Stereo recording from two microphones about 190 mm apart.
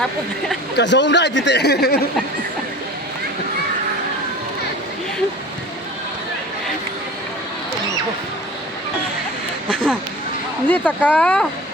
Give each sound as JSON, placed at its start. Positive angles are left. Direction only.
{"t": 0.8, "sound": "speech", "side_deg": 70}
{"t": 9.6, "sound": "a sound", "side_deg": 5}
{"t": 10.7, "sound": "speech", "side_deg": 10}